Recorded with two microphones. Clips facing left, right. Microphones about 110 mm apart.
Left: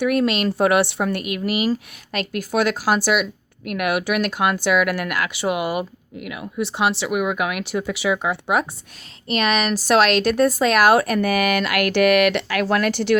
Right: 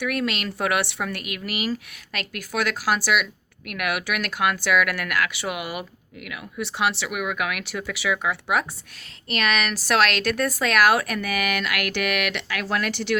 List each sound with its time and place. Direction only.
0.0 s a woman's voice: 30° left (ahead or behind); by 13.1 s 45° left (ahead or behind)